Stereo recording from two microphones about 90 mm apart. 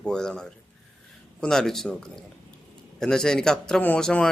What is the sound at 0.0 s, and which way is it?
Speech, 5° left (ahead or behind).